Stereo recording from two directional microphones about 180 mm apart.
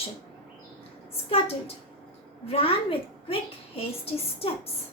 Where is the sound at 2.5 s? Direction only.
30° left (ahead or behind).